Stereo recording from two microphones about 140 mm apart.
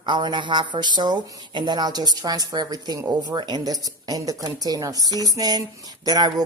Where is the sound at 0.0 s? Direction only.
30° right (ahead or behind).